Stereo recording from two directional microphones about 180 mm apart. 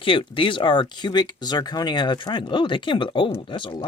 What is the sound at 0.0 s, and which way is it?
Speech, 30° left (ahead or behind).